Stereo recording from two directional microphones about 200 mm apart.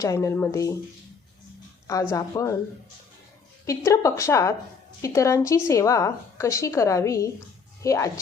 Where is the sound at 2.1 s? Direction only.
15° left (ahead or behind).